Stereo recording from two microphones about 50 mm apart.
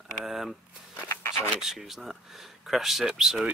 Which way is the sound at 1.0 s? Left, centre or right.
Left.